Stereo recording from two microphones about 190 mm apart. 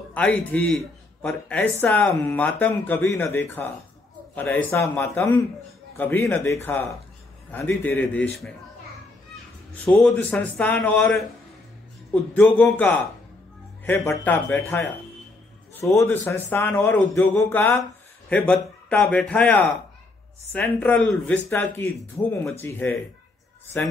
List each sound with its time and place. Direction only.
0.1 s speech: 10° left (ahead or behind)
9.8 s speech: 5° left (ahead or behind)
14.0 s a man's voice: 10° left (ahead or behind)